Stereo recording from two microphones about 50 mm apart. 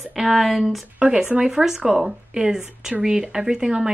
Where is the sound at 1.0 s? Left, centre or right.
Right.